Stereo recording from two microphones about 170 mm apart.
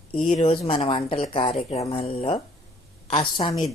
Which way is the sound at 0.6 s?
35° left (ahead or behind).